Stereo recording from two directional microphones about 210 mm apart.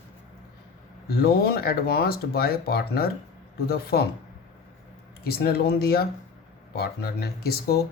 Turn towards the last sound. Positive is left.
turn(degrees=50)  # may be behind; listen again after turning